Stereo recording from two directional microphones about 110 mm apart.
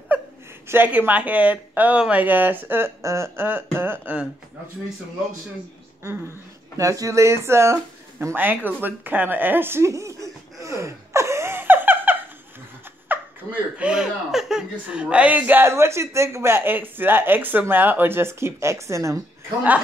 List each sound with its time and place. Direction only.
0.7 s speech: 15° right (ahead or behind)
6.8 s speech: 30° right (ahead or behind)
10.6 s gasp: 25° right (ahead or behind)
13.1 s laughter: 15° right (ahead or behind)
13.7 s speech: 10° right (ahead or behind); by 19.2 s 30° right (ahead or behind)